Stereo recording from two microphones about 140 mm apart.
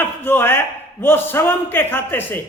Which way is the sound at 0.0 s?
15° left (ahead or behind).